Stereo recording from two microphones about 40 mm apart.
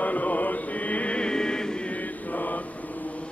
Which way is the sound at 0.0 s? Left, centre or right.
Left.